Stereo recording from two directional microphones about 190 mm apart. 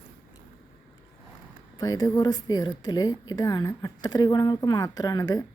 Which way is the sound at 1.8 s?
20° left (ahead or behind).